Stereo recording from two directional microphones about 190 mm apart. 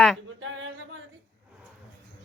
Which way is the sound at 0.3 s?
90° right.